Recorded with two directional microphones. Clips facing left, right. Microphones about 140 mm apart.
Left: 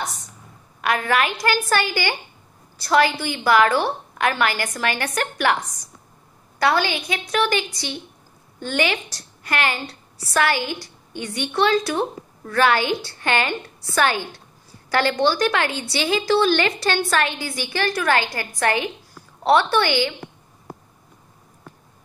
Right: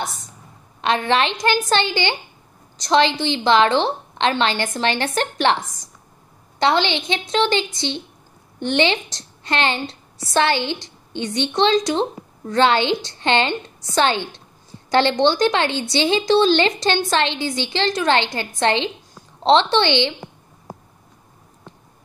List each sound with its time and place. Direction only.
0.7 s a woman's voice: 25° right (ahead or behind)